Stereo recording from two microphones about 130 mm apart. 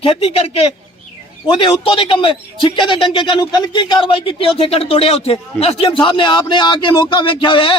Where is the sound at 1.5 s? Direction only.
40° left (ahead or behind).